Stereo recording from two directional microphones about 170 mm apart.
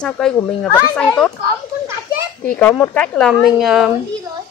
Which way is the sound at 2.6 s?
10° left (ahead or behind).